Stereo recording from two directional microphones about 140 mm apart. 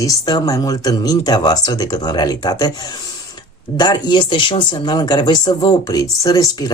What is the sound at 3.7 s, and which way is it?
Speech, 30° left (ahead or behind).